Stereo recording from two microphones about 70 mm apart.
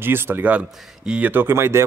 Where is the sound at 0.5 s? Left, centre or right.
Centre.